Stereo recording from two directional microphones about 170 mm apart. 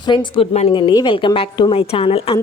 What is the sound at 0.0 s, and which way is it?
Speech, 25° left (ahead or behind).